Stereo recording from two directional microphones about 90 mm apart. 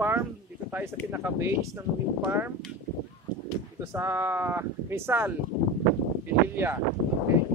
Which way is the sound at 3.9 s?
30° right (ahead or behind).